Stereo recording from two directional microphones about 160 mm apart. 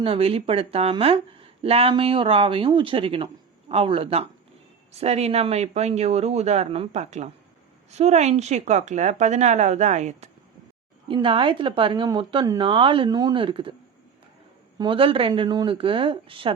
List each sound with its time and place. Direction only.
0.0 s speech: 35° right (ahead or behind)
11.1 s speech: 30° right (ahead or behind)
14.8 s speech: 30° right (ahead or behind)